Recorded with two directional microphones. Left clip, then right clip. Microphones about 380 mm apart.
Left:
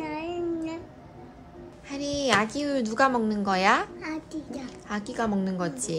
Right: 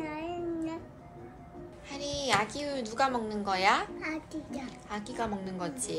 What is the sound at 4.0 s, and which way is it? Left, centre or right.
Speech, centre.